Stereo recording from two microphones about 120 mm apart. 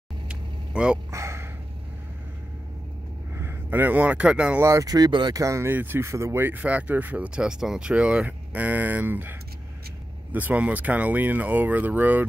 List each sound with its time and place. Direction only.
0.3 s vehicle: 10° right (ahead or behind)
1.1 s a sound: 25° right (ahead or behind)
3.3 s speech: 20° right (ahead or behind)
4.6 s speech: 25° right (ahead or behind)
5.4 s speech: 25° right (ahead or behind)